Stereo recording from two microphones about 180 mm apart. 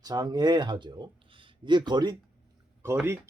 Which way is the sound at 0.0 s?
20° right (ahead or behind).